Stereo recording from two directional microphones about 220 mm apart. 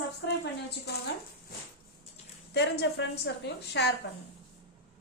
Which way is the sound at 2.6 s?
50° left (ahead or behind).